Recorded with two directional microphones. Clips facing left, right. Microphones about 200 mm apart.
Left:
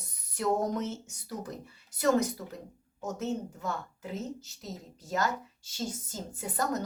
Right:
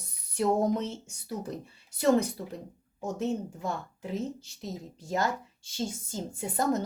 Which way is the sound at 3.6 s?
30° right (ahead or behind).